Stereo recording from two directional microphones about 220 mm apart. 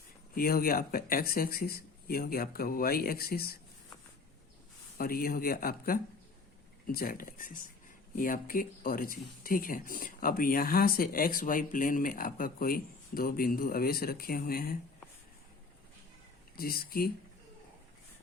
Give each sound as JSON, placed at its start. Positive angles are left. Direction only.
{"t": 0.3, "sound": "speech", "side_deg": 40}
{"t": 4.9, "sound": "speech", "side_deg": 40}
{"t": 16.6, "sound": "speech", "side_deg": 45}